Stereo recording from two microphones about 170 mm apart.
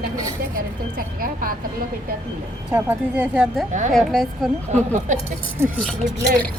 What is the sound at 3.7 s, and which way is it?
Speech, 45° right (ahead or behind).